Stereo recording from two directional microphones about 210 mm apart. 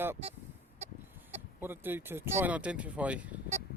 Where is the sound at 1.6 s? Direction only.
10° right (ahead or behind).